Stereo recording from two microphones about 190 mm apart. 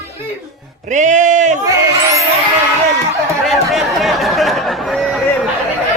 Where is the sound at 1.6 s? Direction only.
15° right (ahead or behind).